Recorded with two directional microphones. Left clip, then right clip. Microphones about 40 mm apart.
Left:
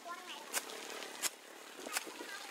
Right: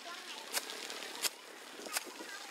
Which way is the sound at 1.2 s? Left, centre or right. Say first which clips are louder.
Right 3 dB; centre.